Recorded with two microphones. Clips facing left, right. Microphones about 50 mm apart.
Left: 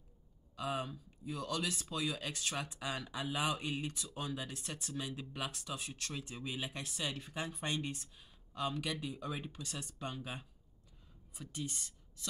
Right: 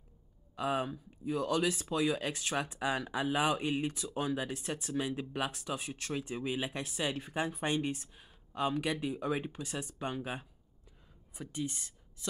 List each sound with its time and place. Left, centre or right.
0.6 s speech: right